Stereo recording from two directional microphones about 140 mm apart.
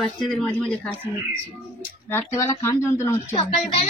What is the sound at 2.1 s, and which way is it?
Speech, 20° left (ahead or behind).